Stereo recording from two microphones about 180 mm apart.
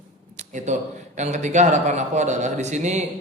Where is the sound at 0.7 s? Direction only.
40° right (ahead or behind).